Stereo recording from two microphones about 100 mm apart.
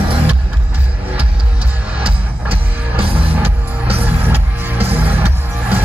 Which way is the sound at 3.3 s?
15° right (ahead or behind).